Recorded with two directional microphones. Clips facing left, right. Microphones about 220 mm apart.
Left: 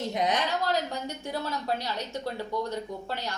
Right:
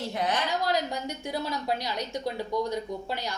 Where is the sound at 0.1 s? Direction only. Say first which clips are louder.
Left 2 dB; 20° left (ahead or behind).